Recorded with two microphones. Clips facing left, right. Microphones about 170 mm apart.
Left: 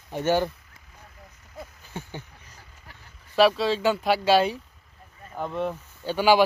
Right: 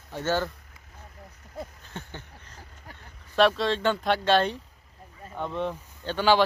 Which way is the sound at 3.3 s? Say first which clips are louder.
Left 2 dB; 5° left (ahead or behind).